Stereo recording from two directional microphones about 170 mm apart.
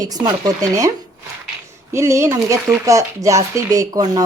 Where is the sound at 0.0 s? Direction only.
20° right (ahead or behind).